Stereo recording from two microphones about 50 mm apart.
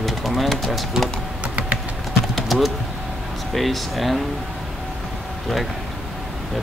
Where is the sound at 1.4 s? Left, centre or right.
Right.